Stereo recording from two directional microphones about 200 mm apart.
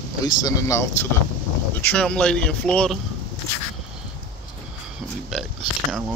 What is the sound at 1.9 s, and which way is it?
A man's voice, 5° left (ahead or behind).